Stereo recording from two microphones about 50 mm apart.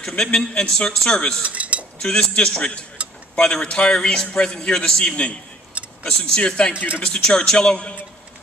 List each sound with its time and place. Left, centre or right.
0.2 s a man's voice: centre
1.4 s chink: right
2.0 s a man's voice: centre
3.0 s tick-tock: right
3.3 s a man's voice: centre